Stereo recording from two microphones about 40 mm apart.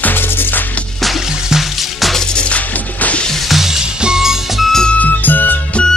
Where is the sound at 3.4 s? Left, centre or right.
Centre.